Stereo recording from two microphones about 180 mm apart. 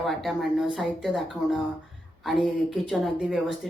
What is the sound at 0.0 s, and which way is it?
Speech, centre (ahead or behind).